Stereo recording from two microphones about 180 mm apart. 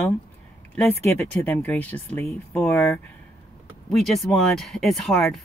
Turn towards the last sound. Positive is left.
turn(degrees=0)  # may be behind; listen again after turning